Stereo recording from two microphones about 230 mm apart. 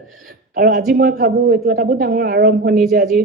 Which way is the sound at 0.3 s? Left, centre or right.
Right.